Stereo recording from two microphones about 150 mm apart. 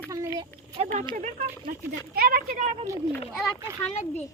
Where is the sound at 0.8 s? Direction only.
35° right (ahead or behind).